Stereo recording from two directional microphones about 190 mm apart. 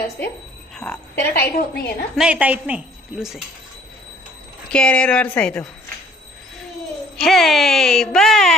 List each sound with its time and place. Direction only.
0.8 s a woman's voice: 10° left (ahead or behind)
1.3 s a woman's voice: 55° left (ahead or behind)
2.1 s speech: 5° right (ahead or behind)
4.7 s speech: 5° left (ahead or behind)
7.2 s speech: centre (ahead or behind)